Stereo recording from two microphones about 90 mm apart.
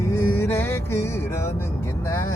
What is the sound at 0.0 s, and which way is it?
Music, 30° left (ahead or behind).